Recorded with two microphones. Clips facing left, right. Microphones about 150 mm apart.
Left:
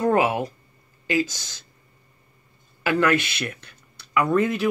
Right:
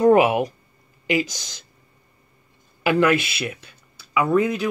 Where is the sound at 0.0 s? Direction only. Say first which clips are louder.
Right 5 dB; 15° right (ahead or behind).